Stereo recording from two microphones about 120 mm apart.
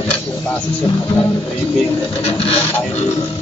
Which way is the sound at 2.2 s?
55° left (ahead or behind).